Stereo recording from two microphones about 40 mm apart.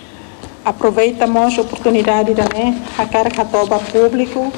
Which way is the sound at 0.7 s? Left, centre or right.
Centre.